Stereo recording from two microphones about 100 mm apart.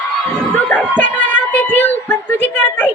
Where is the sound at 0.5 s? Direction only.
15° left (ahead or behind).